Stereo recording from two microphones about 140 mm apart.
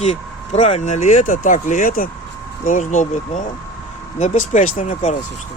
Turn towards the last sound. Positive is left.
turn(degrees=50)  # may be behind; listen again after turning